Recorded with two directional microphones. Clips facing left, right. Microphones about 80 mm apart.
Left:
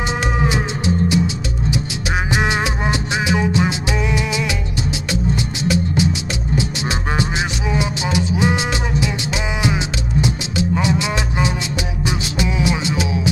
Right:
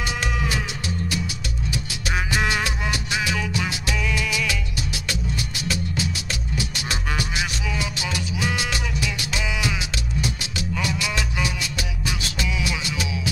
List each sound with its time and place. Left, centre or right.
0.2 s music: left
12.5 s music: left